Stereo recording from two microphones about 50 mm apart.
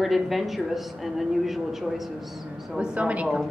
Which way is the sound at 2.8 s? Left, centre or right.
Right.